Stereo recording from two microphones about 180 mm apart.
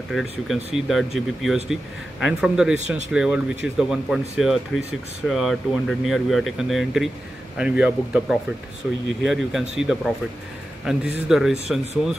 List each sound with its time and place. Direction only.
0.1 s speech: centre (ahead or behind)